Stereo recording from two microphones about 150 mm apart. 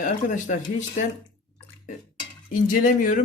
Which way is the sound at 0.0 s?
55° left (ahead or behind).